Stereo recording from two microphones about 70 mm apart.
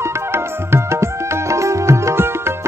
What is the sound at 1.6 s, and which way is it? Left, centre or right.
Music, right.